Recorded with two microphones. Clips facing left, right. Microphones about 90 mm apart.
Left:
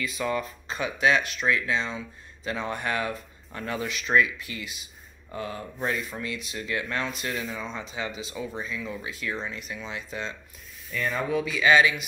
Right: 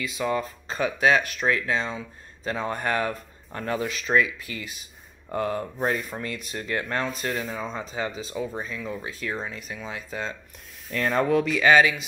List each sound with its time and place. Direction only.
0.2 s speech: 30° right (ahead or behind)
4.5 s speech: 30° left (ahead or behind)
5.3 s speech: 55° right (ahead or behind)
5.8 s speech: 40° right (ahead or behind)
10.9 s speech: 75° right (ahead or behind)